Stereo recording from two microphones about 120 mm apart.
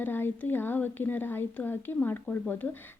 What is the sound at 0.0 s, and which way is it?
A woman's voice, 15° left (ahead or behind).